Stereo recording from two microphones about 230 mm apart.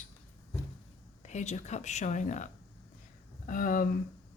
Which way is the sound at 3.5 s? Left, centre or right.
Left.